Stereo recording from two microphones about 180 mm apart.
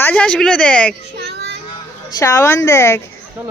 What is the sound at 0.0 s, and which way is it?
Speech, 5° left (ahead or behind).